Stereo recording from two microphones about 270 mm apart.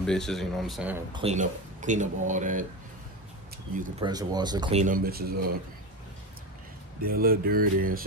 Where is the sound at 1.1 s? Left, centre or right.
Right.